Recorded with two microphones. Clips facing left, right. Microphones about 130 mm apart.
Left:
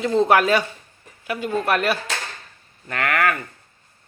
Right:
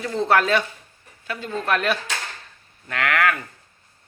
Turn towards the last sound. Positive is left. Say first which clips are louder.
# even
turn(degrees=0)  # may be behind; listen again after turning